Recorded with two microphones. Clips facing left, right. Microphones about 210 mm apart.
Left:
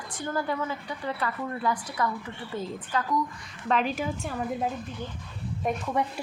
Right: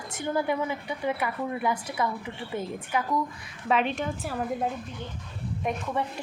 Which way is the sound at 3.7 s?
Centre (ahead or behind).